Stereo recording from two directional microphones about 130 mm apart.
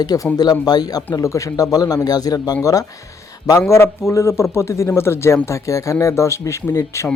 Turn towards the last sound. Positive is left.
turn(degrees=25)  # may be behind; listen again after turning